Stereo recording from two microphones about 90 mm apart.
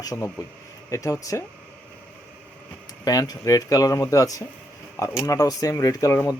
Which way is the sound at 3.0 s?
45° left (ahead or behind).